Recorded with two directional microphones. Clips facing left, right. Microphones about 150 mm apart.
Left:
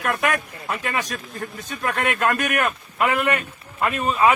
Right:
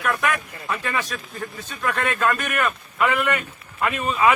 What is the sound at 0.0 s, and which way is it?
Speech, 45° left (ahead or behind).